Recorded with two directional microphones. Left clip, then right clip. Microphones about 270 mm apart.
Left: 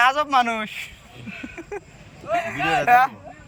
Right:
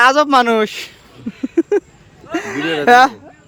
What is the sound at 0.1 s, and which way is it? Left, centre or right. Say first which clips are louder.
Speech: right 8 dB; right.